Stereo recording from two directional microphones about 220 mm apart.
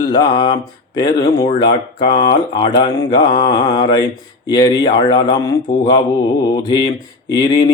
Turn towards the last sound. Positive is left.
turn(degrees=20)  # may be behind; listen again after turning